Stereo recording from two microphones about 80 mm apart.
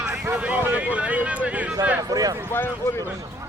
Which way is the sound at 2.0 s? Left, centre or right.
Right.